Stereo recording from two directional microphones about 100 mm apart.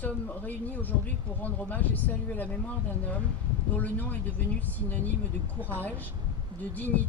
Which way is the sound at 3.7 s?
15° left (ahead or behind).